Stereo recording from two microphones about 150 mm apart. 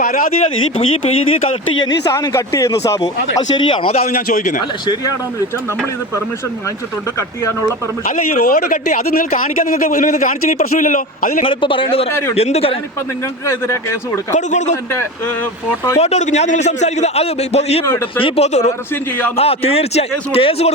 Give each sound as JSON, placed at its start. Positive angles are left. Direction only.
{"t": 0.0, "sound": "speech", "side_deg": 60}
{"t": 0.4, "sound": "a man's voice", "side_deg": 45}
{"t": 1.8, "sound": "a man's voice", "side_deg": 25}
{"t": 3.5, "sound": "a man's voice", "side_deg": 30}
{"t": 4.3, "sound": "speech", "side_deg": 55}
{"t": 8.0, "sound": "speech", "side_deg": 60}
{"t": 8.9, "sound": "speech", "side_deg": 65}
{"t": 11.4, "sound": "a man's voice", "side_deg": 35}
{"t": 14.3, "sound": "a man's voice", "side_deg": 55}
{"t": 16.0, "sound": "a man's voice", "side_deg": 45}